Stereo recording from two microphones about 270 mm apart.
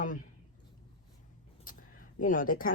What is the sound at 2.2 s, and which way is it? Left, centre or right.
Speech, left.